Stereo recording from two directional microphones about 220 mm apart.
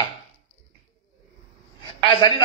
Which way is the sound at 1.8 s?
20° left (ahead or behind).